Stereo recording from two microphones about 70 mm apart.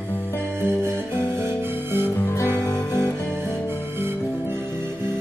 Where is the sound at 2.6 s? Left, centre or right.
Left.